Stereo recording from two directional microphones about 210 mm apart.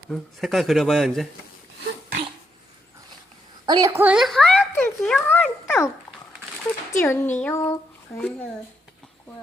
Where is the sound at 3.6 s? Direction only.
15° right (ahead or behind); by 5.9 s 10° left (ahead or behind).